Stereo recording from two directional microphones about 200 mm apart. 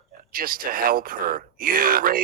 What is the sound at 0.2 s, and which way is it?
Speech, 45° right (ahead or behind).